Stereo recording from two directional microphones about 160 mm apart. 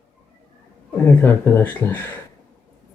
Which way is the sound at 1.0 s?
10° left (ahead or behind).